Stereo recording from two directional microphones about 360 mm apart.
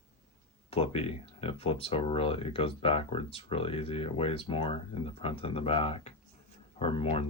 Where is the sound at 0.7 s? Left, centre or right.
Centre.